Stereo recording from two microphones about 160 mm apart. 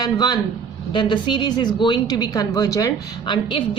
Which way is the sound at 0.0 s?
25° left (ahead or behind).